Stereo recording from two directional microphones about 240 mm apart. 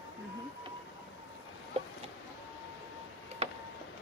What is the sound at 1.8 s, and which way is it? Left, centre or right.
Chicken, right.